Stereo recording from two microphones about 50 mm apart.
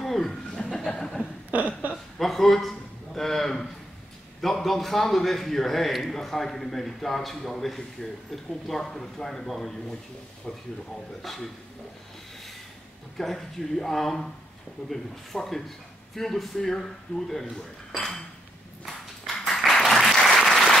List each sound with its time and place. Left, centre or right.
0.0 s chuckle: centre
1.5 s a sound: right
2.1 s a sound: centre
3.2 s a man's voice: centre
13.2 s a man's voice: centre
17.9 s speech: centre
18.9 s applause: centre